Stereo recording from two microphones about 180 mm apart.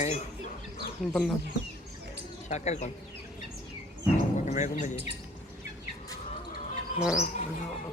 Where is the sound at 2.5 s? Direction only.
40° left (ahead or behind).